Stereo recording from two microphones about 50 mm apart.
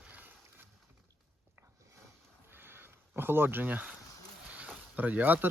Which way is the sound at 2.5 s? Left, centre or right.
Right.